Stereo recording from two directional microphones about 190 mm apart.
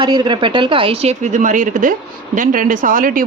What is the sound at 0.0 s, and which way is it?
A woman's voice, 20° right (ahead or behind).